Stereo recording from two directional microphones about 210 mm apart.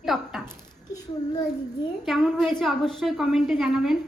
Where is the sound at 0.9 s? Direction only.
20° left (ahead or behind).